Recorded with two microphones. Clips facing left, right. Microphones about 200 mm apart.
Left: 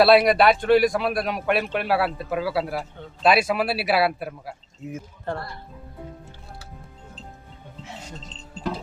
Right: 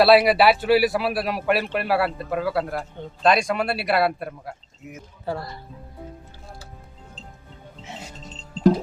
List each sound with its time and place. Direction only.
0.0 s a man's voice: centre (ahead or behind)
4.8 s speech: 30° left (ahead or behind)
5.3 s a man's voice: 5° right (ahead or behind)
8.7 s a sound: 40° right (ahead or behind)